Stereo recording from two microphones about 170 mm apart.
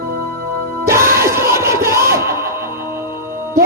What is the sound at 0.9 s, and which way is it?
Music, 15° right (ahead or behind).